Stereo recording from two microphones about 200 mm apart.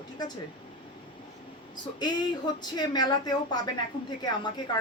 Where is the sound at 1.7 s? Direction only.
20° left (ahead or behind).